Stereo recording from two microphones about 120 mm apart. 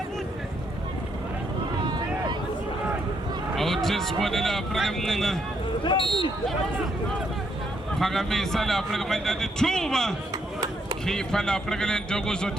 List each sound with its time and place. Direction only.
3.5 s speech: centre (ahead or behind)
5.8 s speech: 40° left (ahead or behind)
7.9 s speech: centre (ahead or behind)